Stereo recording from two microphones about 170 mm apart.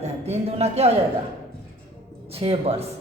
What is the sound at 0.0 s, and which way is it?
Speech, 40° right (ahead or behind).